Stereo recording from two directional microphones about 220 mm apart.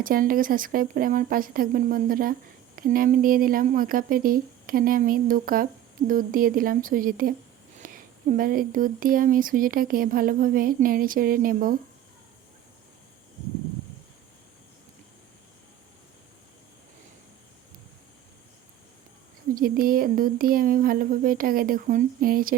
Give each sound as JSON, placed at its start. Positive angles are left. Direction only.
{"t": 0.0, "sound": "speech", "side_deg": -40}
{"t": 19.5, "sound": "speech", "side_deg": -40}